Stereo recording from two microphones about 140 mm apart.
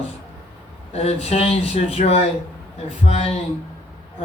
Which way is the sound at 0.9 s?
45° left (ahead or behind).